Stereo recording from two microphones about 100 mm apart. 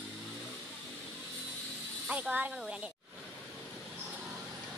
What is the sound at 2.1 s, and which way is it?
Speech, 15° right (ahead or behind).